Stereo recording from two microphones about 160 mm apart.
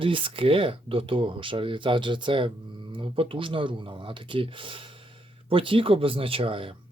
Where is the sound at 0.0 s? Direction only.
35° right (ahead or behind).